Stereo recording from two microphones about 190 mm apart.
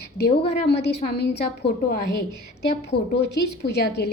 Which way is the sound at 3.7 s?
60° left (ahead or behind).